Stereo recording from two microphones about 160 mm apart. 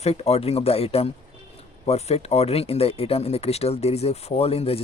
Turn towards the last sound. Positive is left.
turn(degrees=40)  # may be behind; listen again after turning